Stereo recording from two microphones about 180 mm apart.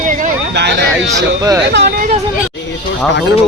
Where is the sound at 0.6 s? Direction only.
70° right (ahead or behind).